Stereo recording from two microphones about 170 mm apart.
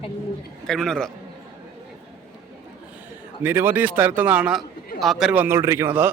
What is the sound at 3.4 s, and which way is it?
A man's voice, 15° right (ahead or behind).